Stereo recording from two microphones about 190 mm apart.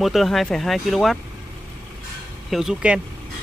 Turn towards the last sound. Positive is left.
turn(degrees=-5)  # may be behind; listen again after turning